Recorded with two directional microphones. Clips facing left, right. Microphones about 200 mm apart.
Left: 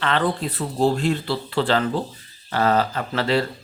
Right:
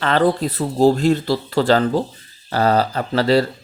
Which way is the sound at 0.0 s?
40° right (ahead or behind).